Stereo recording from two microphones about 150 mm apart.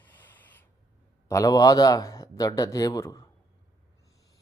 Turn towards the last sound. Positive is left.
turn(degrees=25)  # may be behind; listen again after turning